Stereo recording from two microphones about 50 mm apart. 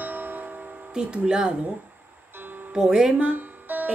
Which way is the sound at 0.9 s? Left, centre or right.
Centre.